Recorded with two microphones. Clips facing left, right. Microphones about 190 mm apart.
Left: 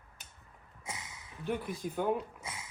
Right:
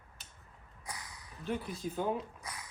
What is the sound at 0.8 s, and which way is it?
Zipper, 25° left (ahead or behind).